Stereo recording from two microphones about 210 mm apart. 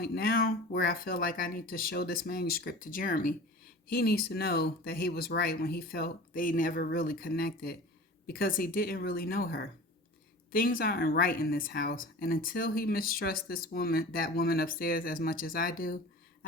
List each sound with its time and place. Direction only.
0.0 s speech: 45° left (ahead or behind)